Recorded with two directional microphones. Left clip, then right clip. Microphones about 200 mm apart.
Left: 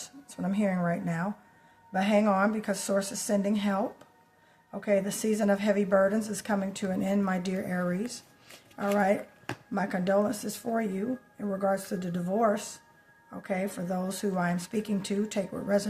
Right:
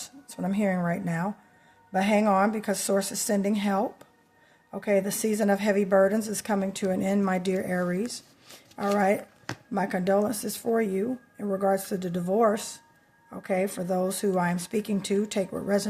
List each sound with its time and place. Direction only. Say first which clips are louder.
0.0 s a woman's voice: right 3 dB; 30° right (ahead or behind)
8.7 s speech: right 2 dB; 15° right (ahead or behind)
9.7 s a woman's voice: right 2 dB; 30° right (ahead or behind)